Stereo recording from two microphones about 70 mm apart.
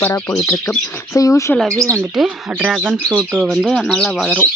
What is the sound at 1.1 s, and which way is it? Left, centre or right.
Speech, left.